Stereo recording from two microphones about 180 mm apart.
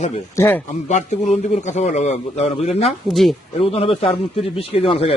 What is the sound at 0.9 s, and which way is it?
A man's voice, 40° left (ahead or behind).